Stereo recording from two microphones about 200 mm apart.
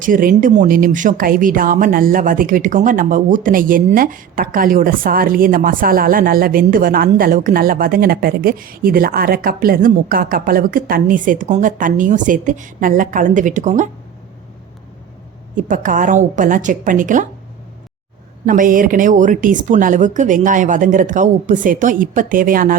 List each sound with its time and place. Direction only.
0.0 s speech: 45° right (ahead or behind)
15.5 s speech: 40° right (ahead or behind)
18.4 s speech: 45° right (ahead or behind)